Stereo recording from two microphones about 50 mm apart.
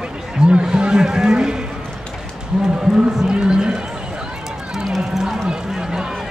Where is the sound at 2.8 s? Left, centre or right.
Centre.